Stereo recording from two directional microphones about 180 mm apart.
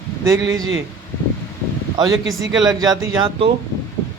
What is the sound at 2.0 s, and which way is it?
Speech, 20° right (ahead or behind).